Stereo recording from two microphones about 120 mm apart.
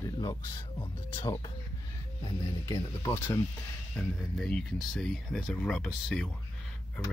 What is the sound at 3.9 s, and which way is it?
Speech, 10° left (ahead or behind).